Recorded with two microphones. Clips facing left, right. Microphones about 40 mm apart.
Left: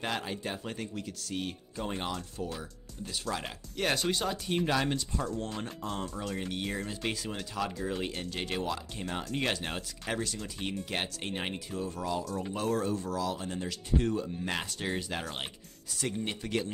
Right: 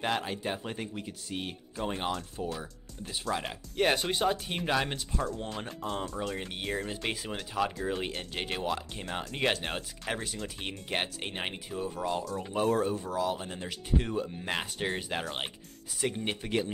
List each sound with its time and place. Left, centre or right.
0.0 s speech: centre
5.1 s speech: centre; by 9.0 s right
9.0 s speech: centre
12.3 s speech: centre